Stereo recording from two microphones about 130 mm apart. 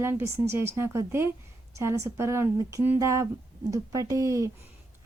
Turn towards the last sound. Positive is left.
turn(degrees=-25)  # may be behind; listen again after turning